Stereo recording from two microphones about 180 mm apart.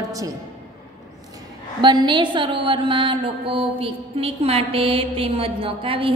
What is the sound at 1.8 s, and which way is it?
Mantra, 25° right (ahead or behind).